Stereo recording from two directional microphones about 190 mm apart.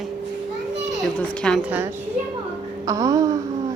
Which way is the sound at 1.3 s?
5° left (ahead or behind).